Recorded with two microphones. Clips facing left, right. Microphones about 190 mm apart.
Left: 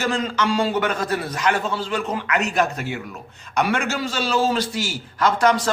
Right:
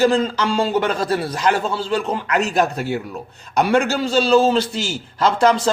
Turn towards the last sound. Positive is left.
turn(degrees=-25)  # may be behind; listen again after turning